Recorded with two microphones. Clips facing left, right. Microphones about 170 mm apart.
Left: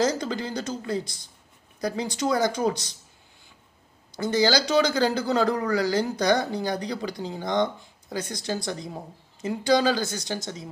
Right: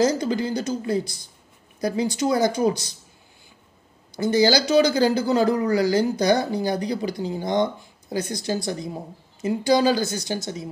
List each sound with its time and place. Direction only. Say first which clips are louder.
0.0 s speech: right 4 dB; 10° right (ahead or behind)
4.2 s speech: right 4 dB; 10° right (ahead or behind)